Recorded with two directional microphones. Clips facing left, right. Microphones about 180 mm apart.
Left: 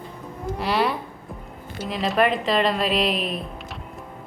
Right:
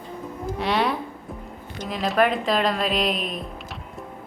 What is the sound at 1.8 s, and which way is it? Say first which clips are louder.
A woman's voice: even; centre (ahead or behind).